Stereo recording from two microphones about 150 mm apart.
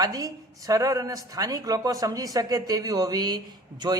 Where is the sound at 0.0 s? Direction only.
25° right (ahead or behind).